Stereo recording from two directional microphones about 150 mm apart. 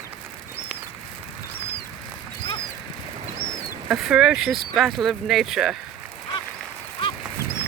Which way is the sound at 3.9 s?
5° right (ahead or behind).